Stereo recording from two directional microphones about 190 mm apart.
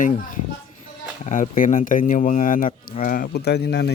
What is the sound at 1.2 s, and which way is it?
Speech, 40° left (ahead or behind).